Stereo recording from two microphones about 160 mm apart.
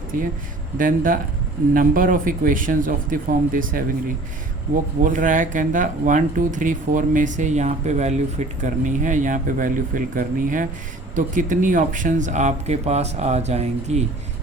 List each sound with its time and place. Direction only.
0.1 s speech: 55° right (ahead or behind)
5.0 s speech: 55° right (ahead or behind)